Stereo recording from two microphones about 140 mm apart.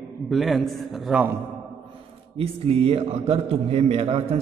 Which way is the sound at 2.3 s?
45° right (ahead or behind).